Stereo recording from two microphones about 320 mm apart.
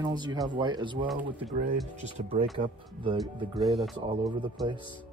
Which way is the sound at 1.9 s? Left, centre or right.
Right.